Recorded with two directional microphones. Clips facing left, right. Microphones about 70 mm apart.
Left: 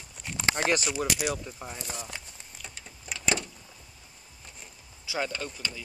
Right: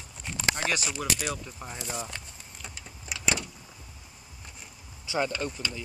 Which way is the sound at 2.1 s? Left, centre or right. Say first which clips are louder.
Even; centre.